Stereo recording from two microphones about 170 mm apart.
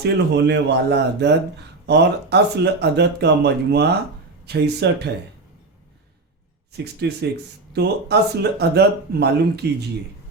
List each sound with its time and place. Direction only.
0.0 s a man's voice: 80° right
6.7 s speech: 75° right (ahead or behind)